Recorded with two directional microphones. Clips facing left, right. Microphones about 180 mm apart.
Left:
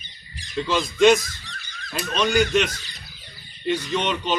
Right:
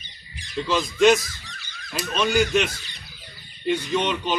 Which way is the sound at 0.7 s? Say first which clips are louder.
Left 1 dB; centre (ahead or behind).